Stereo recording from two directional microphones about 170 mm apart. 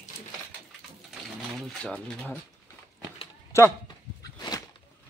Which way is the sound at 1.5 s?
5° left (ahead or behind).